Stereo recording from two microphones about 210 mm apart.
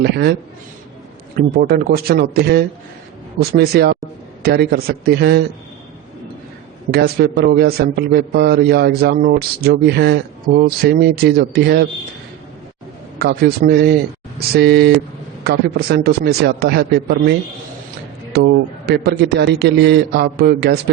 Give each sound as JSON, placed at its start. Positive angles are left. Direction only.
{"t": 0.0, "sound": "a man's voice", "side_deg": -50}
{"t": 1.4, "sound": "a man's voice", "side_deg": -45}
{"t": 6.9, "sound": "a man's voice", "side_deg": -45}
{"t": 13.1, "sound": "a man's voice", "side_deg": -50}
{"t": 18.3, "sound": "a man's voice", "side_deg": -50}